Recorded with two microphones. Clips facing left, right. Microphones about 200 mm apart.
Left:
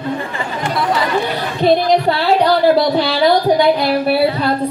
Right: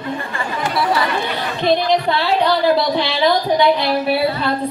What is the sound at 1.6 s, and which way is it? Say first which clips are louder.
A woman's voice: left 4 dB; 40° left (ahead or behind).